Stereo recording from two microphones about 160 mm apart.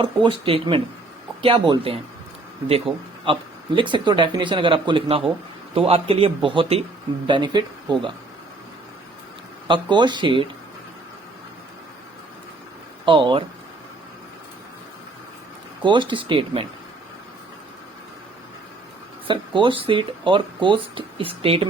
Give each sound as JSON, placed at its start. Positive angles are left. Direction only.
{"t": 0.0, "sound": "speech", "side_deg": -30}
{"t": 9.6, "sound": "speech", "side_deg": -30}
{"t": 13.1, "sound": "speech", "side_deg": -30}
{"t": 15.8, "sound": "speech", "side_deg": -30}
{"t": 19.3, "sound": "speech", "side_deg": -30}